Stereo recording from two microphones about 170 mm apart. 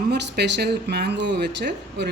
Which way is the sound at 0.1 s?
85° right.